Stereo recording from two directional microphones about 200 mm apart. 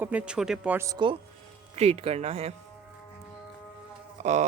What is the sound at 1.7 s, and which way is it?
Speech, 30° right (ahead or behind).